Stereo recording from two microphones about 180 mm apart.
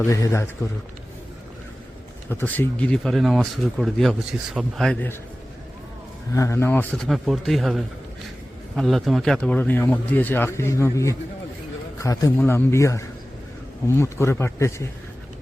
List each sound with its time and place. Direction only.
0.0 s a man's voice: 15° left (ahead or behind)
2.3 s speech: 10° left (ahead or behind)
6.3 s a man's voice: 15° left (ahead or behind)